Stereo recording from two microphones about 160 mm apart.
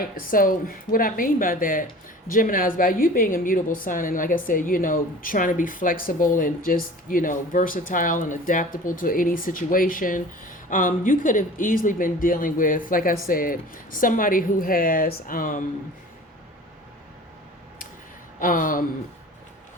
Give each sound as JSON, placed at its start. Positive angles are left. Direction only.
{"t": 0.0, "sound": "speech", "side_deg": 60}
{"t": 18.3, "sound": "speech", "side_deg": 60}